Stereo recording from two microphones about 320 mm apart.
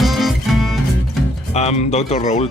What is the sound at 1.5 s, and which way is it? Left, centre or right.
Speech, left.